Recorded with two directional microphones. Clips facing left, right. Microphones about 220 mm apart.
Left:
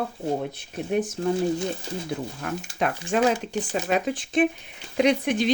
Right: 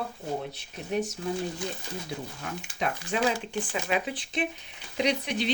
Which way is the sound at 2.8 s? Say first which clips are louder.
Left 4 dB; 55° left (ahead or behind).